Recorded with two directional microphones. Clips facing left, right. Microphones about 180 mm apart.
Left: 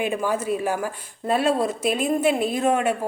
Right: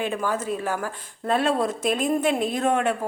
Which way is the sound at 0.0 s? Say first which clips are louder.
Left 2 dB; 10° left (ahead or behind).